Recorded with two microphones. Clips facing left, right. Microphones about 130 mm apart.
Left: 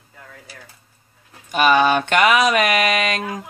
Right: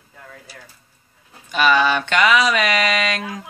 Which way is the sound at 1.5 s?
45° left (ahead or behind).